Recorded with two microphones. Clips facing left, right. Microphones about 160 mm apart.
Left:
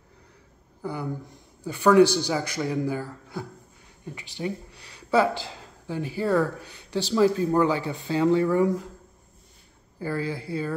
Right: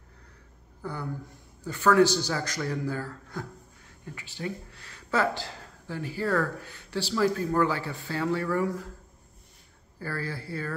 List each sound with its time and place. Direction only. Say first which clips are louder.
0.8 s a man's voice: left 4 dB; 15° left (ahead or behind)
9.9 s a man's voice: left 5 dB; 15° left (ahead or behind)